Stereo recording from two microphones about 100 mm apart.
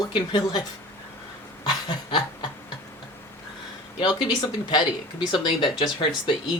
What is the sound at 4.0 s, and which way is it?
Speech, 50° left (ahead or behind).